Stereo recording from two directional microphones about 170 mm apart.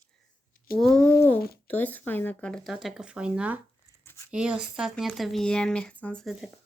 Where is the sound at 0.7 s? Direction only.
Centre (ahead or behind).